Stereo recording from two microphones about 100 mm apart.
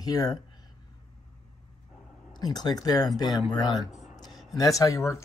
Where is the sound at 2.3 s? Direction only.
45° left (ahead or behind).